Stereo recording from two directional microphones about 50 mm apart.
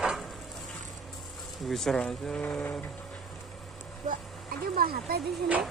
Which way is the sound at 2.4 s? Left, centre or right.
Left.